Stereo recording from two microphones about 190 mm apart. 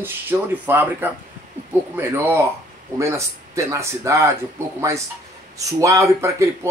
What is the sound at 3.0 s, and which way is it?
Speech, 15° right (ahead or behind).